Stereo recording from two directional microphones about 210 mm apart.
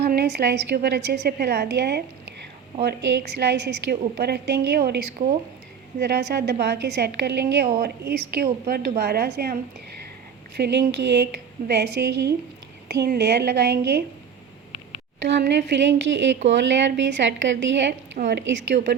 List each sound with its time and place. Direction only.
0.0 s a woman's voice: 50° right (ahead or behind)
10.6 s a woman's voice: 55° right (ahead or behind)
15.3 s a woman's voice: 55° right (ahead or behind)